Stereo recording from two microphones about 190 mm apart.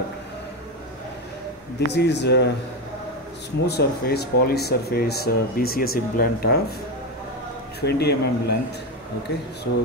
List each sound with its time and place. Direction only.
1.9 s speech: 65° left (ahead or behind)
3.6 s speech: 60° left (ahead or behind)
7.8 s speech: 60° left (ahead or behind)